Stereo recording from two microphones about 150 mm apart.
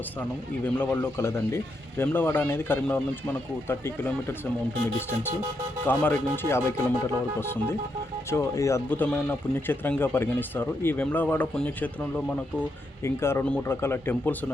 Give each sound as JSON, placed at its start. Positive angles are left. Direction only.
{"t": 0.6, "sound": "speech", "side_deg": 15}
{"t": 5.9, "sound": "speech", "side_deg": 10}